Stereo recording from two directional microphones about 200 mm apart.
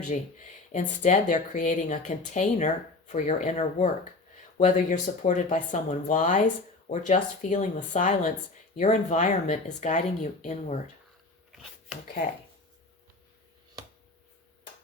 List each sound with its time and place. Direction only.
0.1 s speech: 35° left (ahead or behind)
11.5 s filing: centre (ahead or behind)